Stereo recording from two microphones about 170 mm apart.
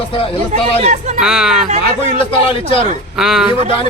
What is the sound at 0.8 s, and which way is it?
Speech, 45° right (ahead or behind).